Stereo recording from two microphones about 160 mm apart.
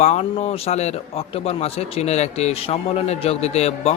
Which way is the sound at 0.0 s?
45° left (ahead or behind).